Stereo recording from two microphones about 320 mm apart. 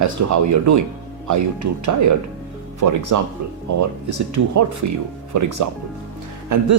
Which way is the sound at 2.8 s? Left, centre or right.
Right.